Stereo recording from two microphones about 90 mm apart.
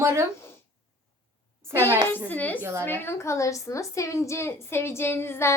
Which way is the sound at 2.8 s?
25° left (ahead or behind).